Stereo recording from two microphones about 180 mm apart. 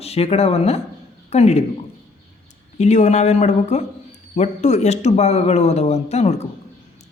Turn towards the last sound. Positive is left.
turn(degrees=35)  # may be behind; listen again after turning